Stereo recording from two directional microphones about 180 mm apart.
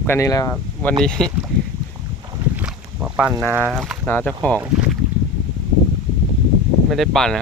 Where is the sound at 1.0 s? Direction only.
5° left (ahead or behind).